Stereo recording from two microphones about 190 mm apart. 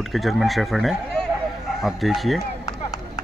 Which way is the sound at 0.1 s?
Centre (ahead or behind).